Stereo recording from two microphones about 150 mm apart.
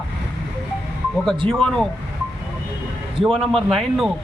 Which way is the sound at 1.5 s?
5° left (ahead or behind).